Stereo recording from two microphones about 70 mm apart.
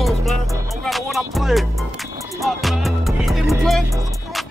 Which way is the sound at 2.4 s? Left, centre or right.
Centre.